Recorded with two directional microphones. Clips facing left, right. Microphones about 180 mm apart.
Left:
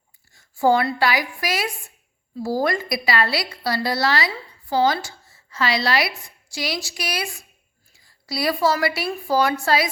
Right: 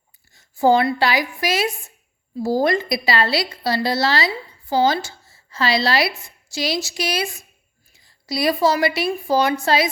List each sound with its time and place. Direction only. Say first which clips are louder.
0.3 s a woman's voice: right 2 dB; 25° right (ahead or behind)